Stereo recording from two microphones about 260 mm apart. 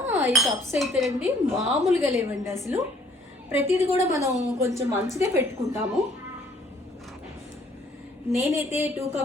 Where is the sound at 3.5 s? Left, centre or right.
Centre.